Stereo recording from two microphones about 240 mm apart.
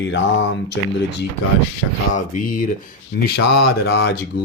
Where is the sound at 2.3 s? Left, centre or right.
Left.